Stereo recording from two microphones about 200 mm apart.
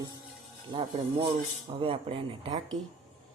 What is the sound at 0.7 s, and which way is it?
Speech, 25° right (ahead or behind).